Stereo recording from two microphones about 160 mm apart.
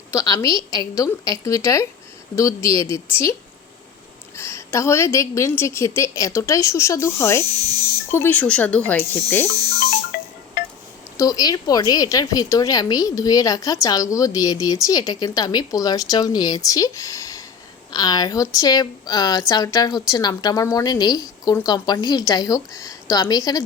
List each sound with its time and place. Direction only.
0.1 s a woman's voice: 20° left (ahead or behind)
4.4 s a woman's voice: 15° left (ahead or behind)
10.1 s music: 70° left (ahead or behind)
11.2 s a woman's voice: 25° left (ahead or behind)